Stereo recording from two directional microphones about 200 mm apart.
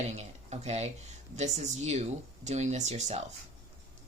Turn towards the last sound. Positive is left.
turn(degrees=-35)  # may be behind; listen again after turning